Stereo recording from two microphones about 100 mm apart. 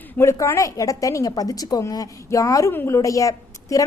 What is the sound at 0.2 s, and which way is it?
A woman's voice, 30° left (ahead or behind).